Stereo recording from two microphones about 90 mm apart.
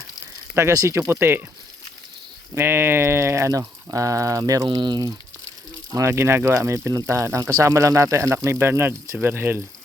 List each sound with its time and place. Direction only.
0.5 s speech: 35° right (ahead or behind)
2.6 s speech: 25° right (ahead or behind); by 5.1 s 50° right (ahead or behind)
5.9 s speech: 30° right (ahead or behind)